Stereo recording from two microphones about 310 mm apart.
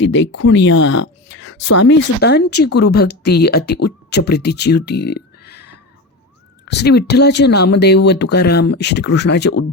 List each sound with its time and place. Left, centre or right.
0.0 s a woman's voice: left